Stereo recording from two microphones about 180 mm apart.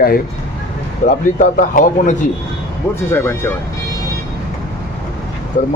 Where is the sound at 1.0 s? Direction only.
45° left (ahead or behind).